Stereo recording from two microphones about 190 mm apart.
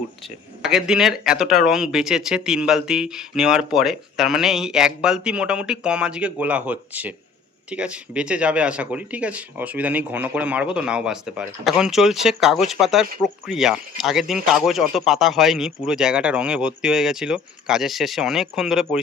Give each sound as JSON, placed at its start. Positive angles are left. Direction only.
{"t": 0.6, "sound": "speech", "side_deg": -5}